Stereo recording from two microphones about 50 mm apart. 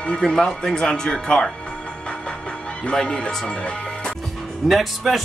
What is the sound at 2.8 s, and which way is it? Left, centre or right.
Speech, centre.